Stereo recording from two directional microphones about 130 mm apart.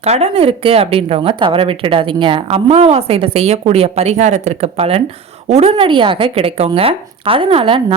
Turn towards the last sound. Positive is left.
turn(degrees=-45)  # may be behind; listen again after turning